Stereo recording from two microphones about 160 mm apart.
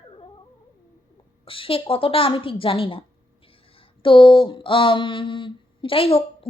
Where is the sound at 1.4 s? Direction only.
35° left (ahead or behind).